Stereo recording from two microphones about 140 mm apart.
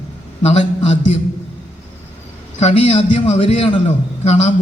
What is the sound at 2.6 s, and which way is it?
A man's voice, 50° left (ahead or behind).